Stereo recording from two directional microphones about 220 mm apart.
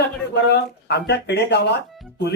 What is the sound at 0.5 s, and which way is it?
Speech, 50° left (ahead or behind).